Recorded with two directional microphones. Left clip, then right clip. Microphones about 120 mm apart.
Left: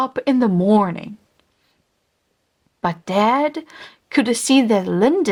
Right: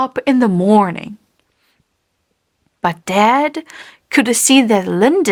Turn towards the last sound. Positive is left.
turn(degrees=-40)  # may be behind; listen again after turning